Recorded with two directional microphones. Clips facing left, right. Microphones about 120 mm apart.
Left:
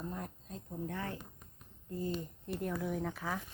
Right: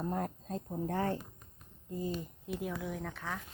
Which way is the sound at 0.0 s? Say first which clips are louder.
Right 7 dB; 50° right (ahead or behind).